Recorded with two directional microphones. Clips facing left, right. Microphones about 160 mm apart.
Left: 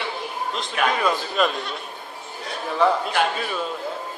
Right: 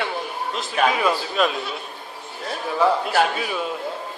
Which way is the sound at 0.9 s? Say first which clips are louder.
Right 1 dB; 5° right (ahead or behind).